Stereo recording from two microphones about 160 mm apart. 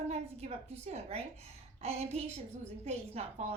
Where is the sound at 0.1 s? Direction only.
40° right (ahead or behind).